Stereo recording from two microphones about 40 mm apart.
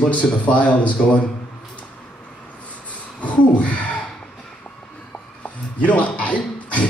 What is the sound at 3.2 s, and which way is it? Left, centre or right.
Beatboxing, left.